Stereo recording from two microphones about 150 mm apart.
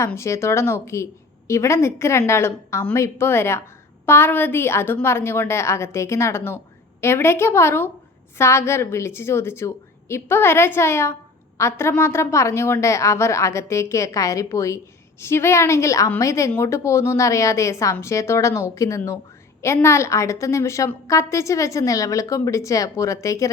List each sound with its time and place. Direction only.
0.0 s a woman's voice: 20° left (ahead or behind)